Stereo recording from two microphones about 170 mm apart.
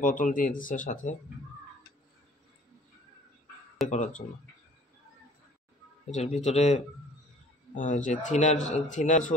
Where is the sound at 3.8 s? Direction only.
45° left (ahead or behind).